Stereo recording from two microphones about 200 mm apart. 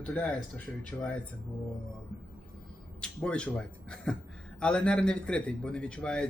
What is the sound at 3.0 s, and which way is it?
A man's voice, 5° left (ahead or behind).